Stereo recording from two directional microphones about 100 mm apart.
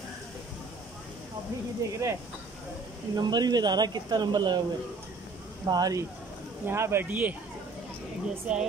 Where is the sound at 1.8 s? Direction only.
30° right (ahead or behind).